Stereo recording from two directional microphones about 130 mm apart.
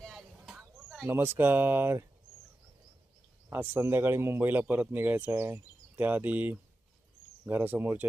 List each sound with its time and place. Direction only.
0.0 s a sound: centre (ahead or behind)
1.0 s a man's voice: 15° right (ahead or behind)
3.5 s a man's voice: 15° right (ahead or behind)